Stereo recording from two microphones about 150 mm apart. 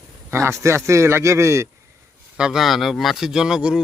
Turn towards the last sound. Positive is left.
turn(degrees=-5)  # may be behind; listen again after turning